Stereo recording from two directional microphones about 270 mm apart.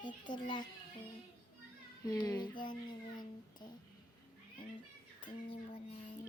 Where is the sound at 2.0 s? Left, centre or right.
Centre.